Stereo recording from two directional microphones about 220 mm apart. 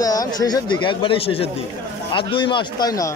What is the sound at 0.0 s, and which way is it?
Speech, 15° left (ahead or behind).